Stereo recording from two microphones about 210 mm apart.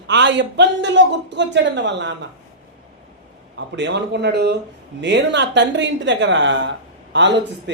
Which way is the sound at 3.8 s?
55° right (ahead or behind).